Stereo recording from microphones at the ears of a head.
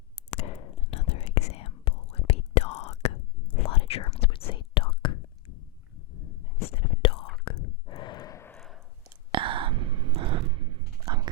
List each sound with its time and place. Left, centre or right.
0.2 s whispering: left
9.0 s whispering: right